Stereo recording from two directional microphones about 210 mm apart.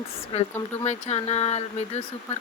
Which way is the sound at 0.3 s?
30° left (ahead or behind).